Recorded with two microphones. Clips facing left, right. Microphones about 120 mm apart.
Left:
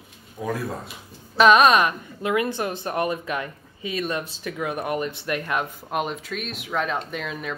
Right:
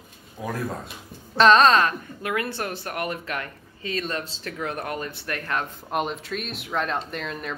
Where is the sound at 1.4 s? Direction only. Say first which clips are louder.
Left 1 dB; 10° left (ahead or behind).